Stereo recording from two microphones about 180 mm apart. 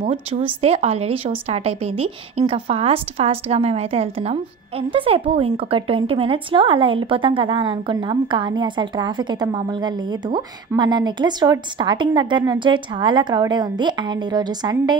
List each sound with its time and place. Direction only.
0.0 s speech: 30° right (ahead or behind)